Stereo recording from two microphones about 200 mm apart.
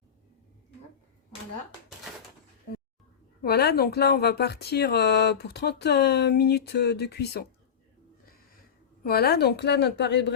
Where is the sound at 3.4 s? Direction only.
55° left (ahead or behind).